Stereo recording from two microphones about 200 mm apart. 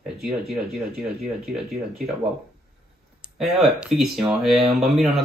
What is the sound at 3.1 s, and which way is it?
Speech, centre (ahead or behind).